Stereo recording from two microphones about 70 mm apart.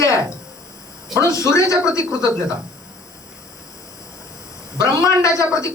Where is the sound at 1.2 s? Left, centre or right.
Left.